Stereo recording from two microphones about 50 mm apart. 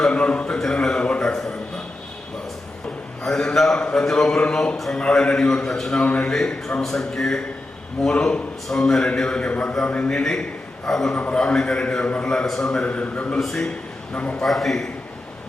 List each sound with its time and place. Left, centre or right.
0.1 s a sound: left
3.2 s a sound: centre
3.9 s a man's voice: centre
6.0 s a man's voice: left
9.5 s a man's voice: left
10.8 s a man's voice: centre
11.1 s a man's voice: left
12.8 s a man's voice: left
13.4 s a man's voice: centre
14.1 s a man's voice: left
14.4 s a man's voice: centre